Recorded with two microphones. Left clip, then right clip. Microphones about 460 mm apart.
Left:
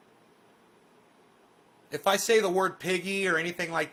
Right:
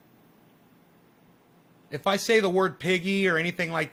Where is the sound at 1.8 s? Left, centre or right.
Centre.